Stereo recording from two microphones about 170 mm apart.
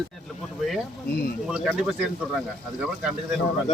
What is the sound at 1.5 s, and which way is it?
Speech, centre (ahead or behind).